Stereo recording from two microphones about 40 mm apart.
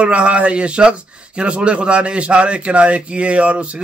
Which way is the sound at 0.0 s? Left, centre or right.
Right.